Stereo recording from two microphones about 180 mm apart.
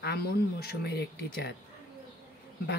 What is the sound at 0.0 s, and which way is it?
Speech, 65° left (ahead or behind).